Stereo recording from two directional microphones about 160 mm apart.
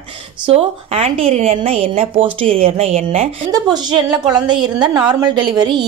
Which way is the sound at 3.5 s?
25° right (ahead or behind).